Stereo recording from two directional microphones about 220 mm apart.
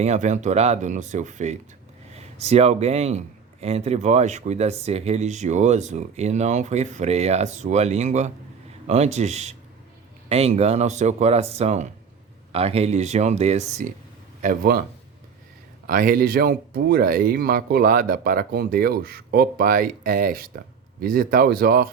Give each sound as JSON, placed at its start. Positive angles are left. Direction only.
{"t": 0.0, "sound": "a man's voice", "side_deg": -30}
{"t": 14.4, "sound": "speech", "side_deg": -40}
{"t": 15.9, "sound": "a man's voice", "side_deg": -40}